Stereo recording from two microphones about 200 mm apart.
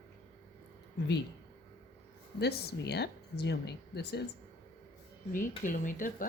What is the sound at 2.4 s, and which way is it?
Speech, 55° left (ahead or behind).